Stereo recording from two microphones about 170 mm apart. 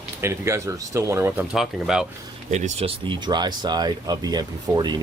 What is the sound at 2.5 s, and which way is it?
Speech, 45° right (ahead or behind).